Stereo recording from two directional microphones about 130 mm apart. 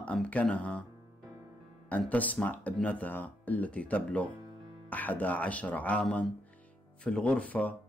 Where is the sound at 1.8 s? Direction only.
10° left (ahead or behind).